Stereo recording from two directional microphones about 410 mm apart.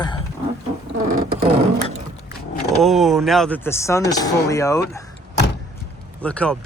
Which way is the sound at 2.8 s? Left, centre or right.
Centre.